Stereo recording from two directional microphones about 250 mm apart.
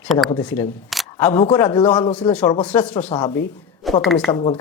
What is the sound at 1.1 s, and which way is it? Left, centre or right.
Speech, centre.